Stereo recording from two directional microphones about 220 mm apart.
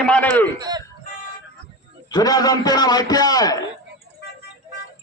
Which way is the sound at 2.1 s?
15° left (ahead or behind).